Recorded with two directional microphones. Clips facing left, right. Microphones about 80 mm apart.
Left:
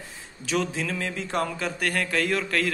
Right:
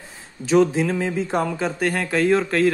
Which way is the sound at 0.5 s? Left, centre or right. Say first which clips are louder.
Right 10 dB; right.